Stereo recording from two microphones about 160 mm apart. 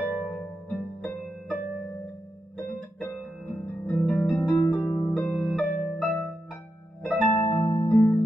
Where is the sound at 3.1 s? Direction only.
Centre (ahead or behind).